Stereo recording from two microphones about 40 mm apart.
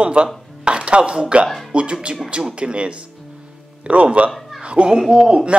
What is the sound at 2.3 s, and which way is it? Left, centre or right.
Speech, right.